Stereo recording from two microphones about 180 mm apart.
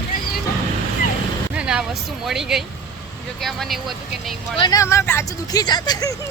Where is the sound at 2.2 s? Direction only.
Centre (ahead or behind).